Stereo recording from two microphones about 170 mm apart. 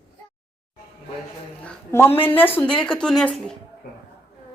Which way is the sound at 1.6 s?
10° left (ahead or behind).